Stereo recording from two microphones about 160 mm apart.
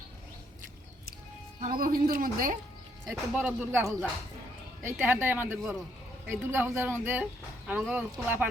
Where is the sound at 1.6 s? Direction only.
65° right (ahead or behind).